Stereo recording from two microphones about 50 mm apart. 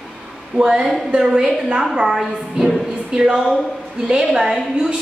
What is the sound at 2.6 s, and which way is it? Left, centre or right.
Music, centre.